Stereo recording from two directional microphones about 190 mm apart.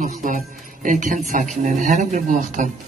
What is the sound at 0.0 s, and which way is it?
A man's voice, 45° right (ahead or behind).